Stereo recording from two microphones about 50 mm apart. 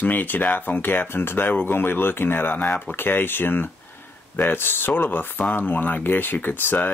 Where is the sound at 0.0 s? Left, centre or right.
Left.